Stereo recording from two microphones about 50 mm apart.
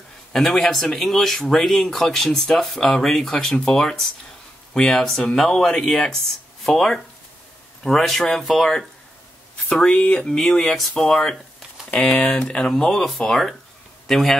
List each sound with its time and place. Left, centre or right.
0.3 s speech: centre
9.7 s speech: centre
11.9 s speech: left
14.0 s speech: centre